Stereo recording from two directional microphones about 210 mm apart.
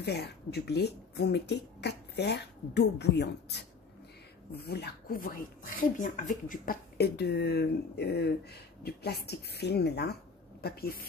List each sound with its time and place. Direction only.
0.0 s speech: 50° left (ahead or behind)